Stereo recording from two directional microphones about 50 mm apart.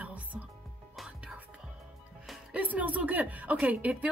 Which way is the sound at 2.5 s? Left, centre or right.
Right.